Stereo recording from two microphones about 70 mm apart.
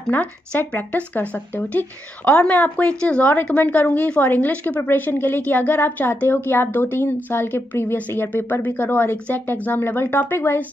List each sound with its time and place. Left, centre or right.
0.1 s a woman's voice: left